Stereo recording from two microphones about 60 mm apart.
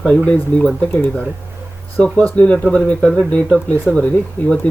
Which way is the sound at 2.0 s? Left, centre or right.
Centre.